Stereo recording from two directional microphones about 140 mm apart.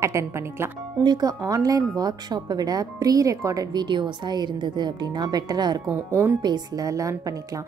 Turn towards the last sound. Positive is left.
turn(degrees=-25)  # may be behind; listen again after turning